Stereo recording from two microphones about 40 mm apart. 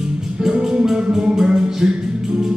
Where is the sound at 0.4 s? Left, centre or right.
Centre.